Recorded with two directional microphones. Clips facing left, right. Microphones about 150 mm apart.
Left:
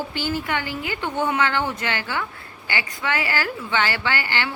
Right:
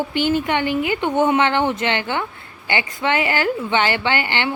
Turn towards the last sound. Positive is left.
turn(degrees=-20)  # may be behind; listen again after turning